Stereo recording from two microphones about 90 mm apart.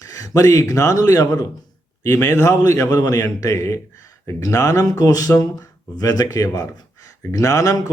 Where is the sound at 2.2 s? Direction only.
30° left (ahead or behind).